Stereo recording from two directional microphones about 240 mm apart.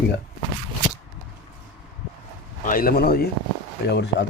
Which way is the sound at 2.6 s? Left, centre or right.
Left.